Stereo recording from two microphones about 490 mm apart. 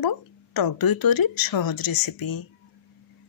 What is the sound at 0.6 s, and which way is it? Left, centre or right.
Speech, left.